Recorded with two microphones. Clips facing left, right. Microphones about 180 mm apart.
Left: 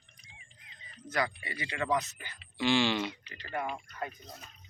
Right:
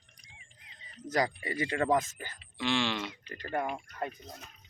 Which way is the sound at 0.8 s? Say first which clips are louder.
Right 3 dB; 40° right (ahead or behind).